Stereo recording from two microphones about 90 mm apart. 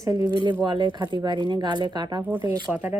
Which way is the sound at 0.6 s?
55° right (ahead or behind).